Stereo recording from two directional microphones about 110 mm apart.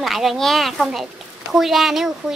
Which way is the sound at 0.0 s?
Centre (ahead or behind).